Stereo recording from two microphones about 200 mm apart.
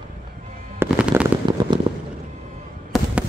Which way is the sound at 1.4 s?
25° right (ahead or behind).